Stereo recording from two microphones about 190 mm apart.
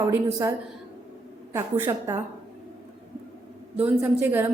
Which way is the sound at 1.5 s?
15° right (ahead or behind).